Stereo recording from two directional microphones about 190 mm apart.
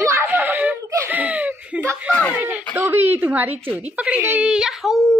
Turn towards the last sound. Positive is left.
turn(degrees=0)  # may be behind; listen again after turning